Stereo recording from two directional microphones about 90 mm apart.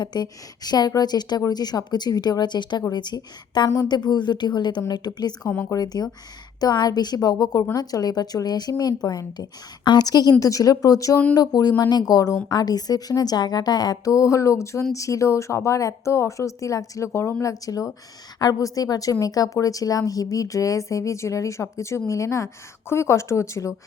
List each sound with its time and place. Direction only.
0.0 s a woman's voice: 50° left (ahead or behind)
5.5 s speech: 25° left (ahead or behind)
5.7 s a woman's voice: 50° left (ahead or behind)